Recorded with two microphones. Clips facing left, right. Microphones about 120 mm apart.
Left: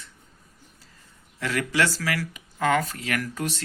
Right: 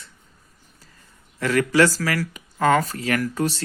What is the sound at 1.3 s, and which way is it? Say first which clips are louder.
Speech: right 7 dB; 50° right (ahead or behind).